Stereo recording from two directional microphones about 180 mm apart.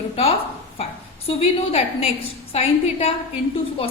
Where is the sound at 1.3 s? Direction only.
35° left (ahead or behind).